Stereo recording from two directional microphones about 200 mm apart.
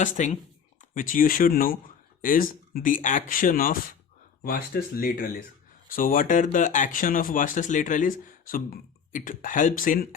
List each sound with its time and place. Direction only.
0.0 s speech: 40° left (ahead or behind)